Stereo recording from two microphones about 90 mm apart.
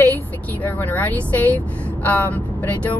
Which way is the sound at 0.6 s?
20° left (ahead or behind).